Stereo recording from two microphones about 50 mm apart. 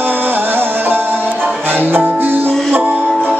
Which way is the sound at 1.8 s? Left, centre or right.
Right.